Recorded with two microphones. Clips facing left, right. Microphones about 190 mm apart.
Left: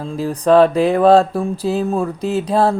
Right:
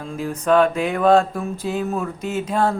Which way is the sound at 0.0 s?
35° left (ahead or behind).